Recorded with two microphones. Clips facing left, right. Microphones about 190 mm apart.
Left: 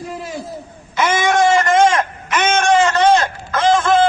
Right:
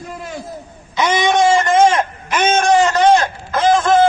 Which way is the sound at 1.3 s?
Centre (ahead or behind).